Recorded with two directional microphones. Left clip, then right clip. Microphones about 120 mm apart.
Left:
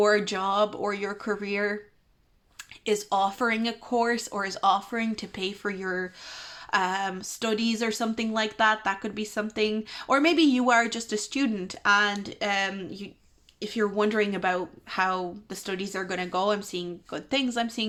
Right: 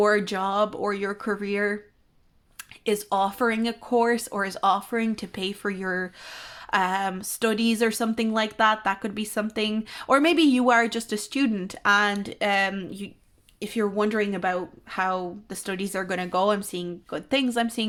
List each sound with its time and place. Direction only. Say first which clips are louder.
0.0 s a woman's voice: right 1 dB; 30° right (ahead or behind)
2.8 s a woman's voice: right 1 dB; 40° right (ahead or behind)